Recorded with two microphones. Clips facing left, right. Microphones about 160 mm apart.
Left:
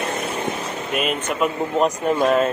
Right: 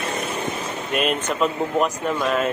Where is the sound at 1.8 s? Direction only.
35° left (ahead or behind).